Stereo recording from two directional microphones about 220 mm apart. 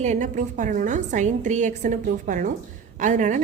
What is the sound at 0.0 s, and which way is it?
A woman's voice, 35° right (ahead or behind).